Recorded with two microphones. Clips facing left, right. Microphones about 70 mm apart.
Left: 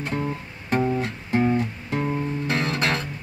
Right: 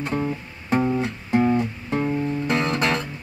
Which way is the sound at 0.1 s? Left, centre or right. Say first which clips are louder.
Right 2 dB; centre.